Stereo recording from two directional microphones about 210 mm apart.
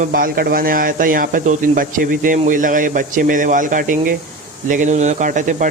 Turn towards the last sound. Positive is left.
turn(degrees=-40)  # may be behind; listen again after turning